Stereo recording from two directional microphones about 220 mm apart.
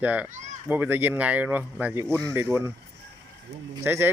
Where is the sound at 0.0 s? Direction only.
5° right (ahead or behind).